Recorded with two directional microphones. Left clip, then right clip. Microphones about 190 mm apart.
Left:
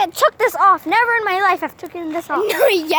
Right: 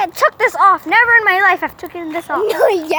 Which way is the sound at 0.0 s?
10° left (ahead or behind).